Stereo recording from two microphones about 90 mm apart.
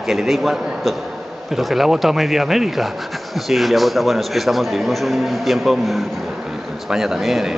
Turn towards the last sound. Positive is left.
turn(degrees=0)  # may be behind; listen again after turning